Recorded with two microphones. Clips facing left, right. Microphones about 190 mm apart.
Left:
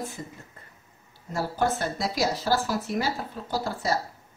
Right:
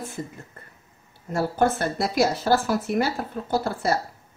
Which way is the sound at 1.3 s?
55° right (ahead or behind).